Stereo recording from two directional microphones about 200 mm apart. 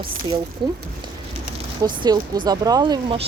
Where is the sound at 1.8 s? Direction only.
20° right (ahead or behind).